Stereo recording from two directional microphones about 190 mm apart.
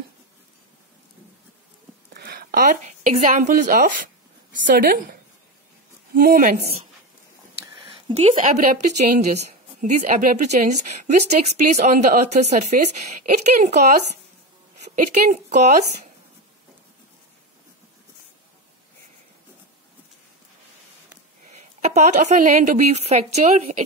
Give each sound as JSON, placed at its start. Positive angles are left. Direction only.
{"t": 2.1, "sound": "speech", "side_deg": -55}
{"t": 6.1, "sound": "speech", "side_deg": -45}
{"t": 7.8, "sound": "a sound", "side_deg": -35}
{"t": 8.9, "sound": "a woman's voice", "side_deg": -35}
{"t": 15.5, "sound": "a woman's voice", "side_deg": -40}
{"t": 21.5, "sound": "a woman's voice", "side_deg": -35}